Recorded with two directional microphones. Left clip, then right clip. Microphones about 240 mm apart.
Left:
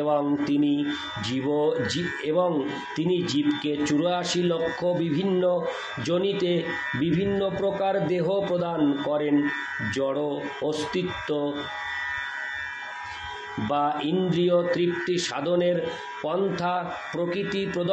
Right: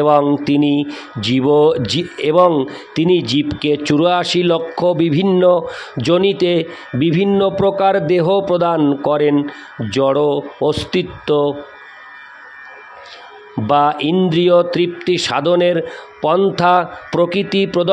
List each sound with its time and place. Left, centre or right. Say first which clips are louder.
0.0 s speech: right 12 dB; right
13.7 s speech: right 12 dB; right